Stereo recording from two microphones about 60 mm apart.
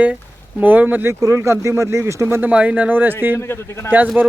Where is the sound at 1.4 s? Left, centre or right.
Right.